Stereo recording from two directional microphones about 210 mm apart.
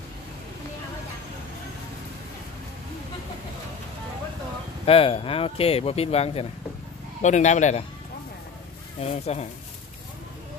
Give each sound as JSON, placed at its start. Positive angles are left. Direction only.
{"t": 4.8, "sound": "speech", "side_deg": 25}
{"t": 9.0, "sound": "speech", "side_deg": 30}